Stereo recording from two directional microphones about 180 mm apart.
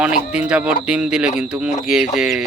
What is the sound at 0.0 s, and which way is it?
Speech, 5° right (ahead or behind).